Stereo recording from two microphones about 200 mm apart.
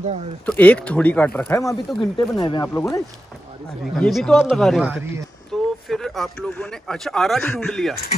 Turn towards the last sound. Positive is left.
turn(degrees=0)  # may be behind; listen again after turning